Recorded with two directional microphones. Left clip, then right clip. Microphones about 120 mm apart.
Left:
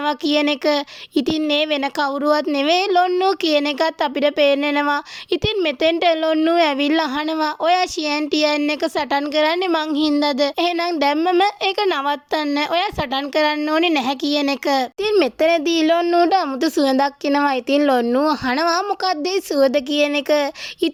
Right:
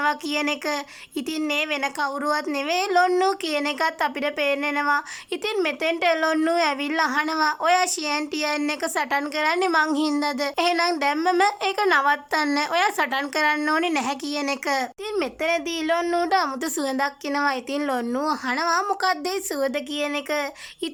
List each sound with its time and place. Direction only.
0.0 s speech: 30° left (ahead or behind)
3.4 s speech: 30° left (ahead or behind)
16.0 s speech: 15° left (ahead or behind)
18.0 s speech: 15° left (ahead or behind)
18.3 s speech: 30° left (ahead or behind)